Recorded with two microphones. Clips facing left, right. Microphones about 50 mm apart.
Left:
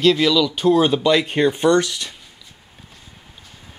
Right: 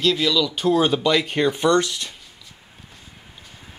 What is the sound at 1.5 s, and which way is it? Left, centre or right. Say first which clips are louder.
Speech: left 2 dB; left.